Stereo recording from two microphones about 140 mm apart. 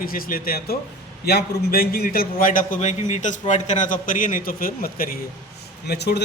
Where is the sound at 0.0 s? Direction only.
90° left.